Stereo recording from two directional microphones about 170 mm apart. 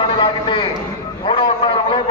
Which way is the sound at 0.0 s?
30° left (ahead or behind).